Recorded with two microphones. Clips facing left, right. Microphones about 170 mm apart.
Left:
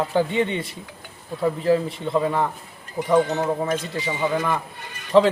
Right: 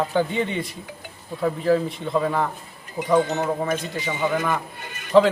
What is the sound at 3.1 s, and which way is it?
Speech, 20° right (ahead or behind).